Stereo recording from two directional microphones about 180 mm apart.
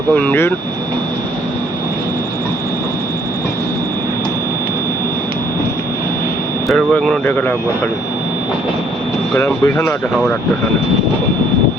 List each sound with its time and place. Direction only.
0.1 s speech: 5° left (ahead or behind)
6.7 s speech: 5° left (ahead or behind)
9.3 s speech: 15° left (ahead or behind)